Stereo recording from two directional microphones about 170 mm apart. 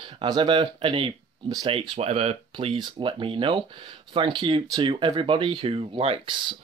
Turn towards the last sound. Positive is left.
turn(degrees=-30)  # may be behind; listen again after turning